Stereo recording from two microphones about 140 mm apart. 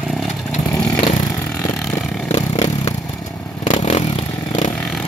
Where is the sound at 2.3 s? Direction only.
50° left (ahead or behind).